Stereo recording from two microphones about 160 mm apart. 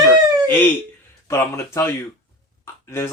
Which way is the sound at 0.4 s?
10° left (ahead or behind).